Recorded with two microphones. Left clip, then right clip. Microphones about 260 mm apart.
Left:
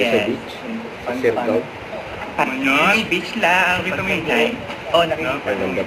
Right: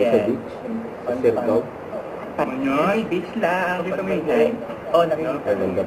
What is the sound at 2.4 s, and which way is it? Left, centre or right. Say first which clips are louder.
A man's voice: left 4 dB; centre.